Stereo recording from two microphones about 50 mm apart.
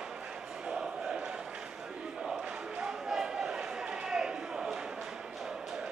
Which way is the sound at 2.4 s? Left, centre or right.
Centre.